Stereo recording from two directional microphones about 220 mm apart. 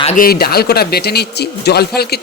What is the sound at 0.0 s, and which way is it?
Speech, 30° left (ahead or behind).